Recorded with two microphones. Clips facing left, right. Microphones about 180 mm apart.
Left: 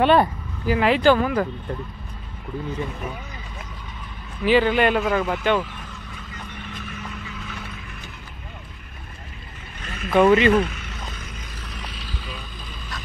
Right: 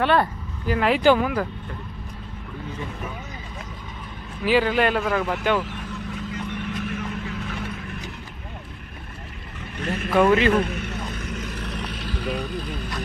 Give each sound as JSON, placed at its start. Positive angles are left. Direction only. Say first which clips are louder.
{"t": 0.0, "sound": "speech", "louder": "left 4 dB", "side_deg": 20}
{"t": 0.7, "sound": "a man's voice", "louder": "left 2 dB", "side_deg": 0}
{"t": 1.0, "sound": "a man's voice", "louder": "right 1 dB", "side_deg": -10}
{"t": 4.5, "sound": "a man's voice", "louder": "left 2 dB", "side_deg": -5}
{"t": 6.5, "sound": "vehicle", "louder": "right 6 dB", "side_deg": -75}
{"t": 9.8, "sound": "vehicle", "louder": "right 7 dB", "side_deg": -60}
{"t": 10.1, "sound": "a man's voice", "louder": "left 2 dB", "side_deg": 0}
{"t": 10.6, "sound": "vehicle", "louder": "right 1 dB", "side_deg": -55}